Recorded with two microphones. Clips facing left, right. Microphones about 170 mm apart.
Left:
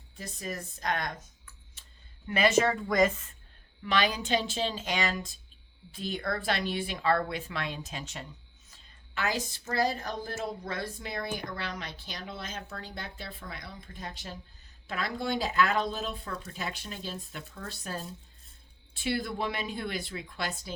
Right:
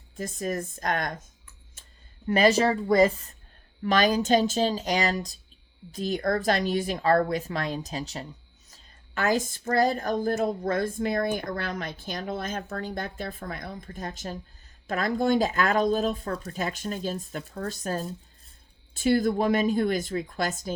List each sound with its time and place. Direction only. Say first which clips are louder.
0.2 s a woman's voice: right 8 dB; 45° right (ahead or behind)
1.8 s a sound: right 4 dB; 50° right (ahead or behind)
2.2 s speech: right 4 dB; 40° right (ahead or behind)
8.7 s a woman's voice: right 3 dB; 50° right (ahead or behind)